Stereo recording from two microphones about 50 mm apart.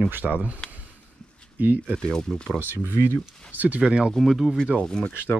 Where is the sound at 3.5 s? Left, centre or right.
Right.